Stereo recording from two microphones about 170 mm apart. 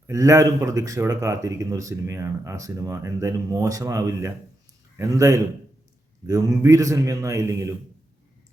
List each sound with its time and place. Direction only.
0.1 s speech: 20° right (ahead or behind)